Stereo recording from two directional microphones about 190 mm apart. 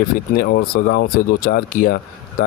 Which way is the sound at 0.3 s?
60° left (ahead or behind).